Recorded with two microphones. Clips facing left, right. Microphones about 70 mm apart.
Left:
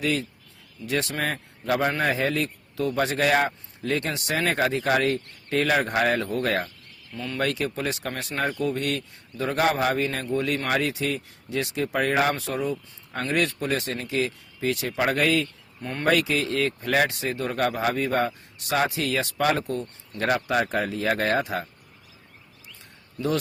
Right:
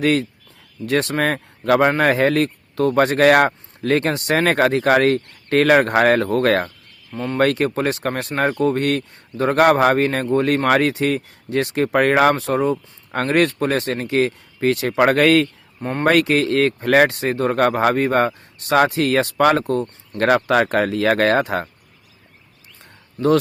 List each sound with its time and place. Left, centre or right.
0.0 s speech: right
7.1 s speech: right
7.4 s a man's voice: right
12.7 s a man's voice: right
15.8 s speech: right
16.1 s speech: right
22.8 s a sound: right